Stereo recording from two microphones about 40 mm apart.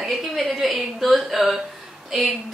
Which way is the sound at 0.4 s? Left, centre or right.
Centre.